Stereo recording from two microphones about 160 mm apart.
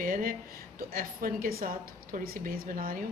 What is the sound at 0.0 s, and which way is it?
Speech, 60° right (ahead or behind).